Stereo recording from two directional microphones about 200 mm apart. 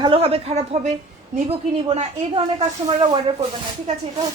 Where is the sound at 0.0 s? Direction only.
25° right (ahead or behind).